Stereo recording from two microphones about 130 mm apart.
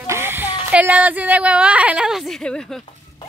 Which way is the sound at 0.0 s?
20° right (ahead or behind).